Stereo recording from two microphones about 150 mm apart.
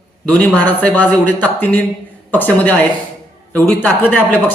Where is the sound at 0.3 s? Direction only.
10° left (ahead or behind).